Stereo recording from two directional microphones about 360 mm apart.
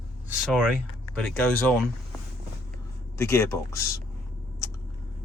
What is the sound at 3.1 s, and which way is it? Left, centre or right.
Speech, centre.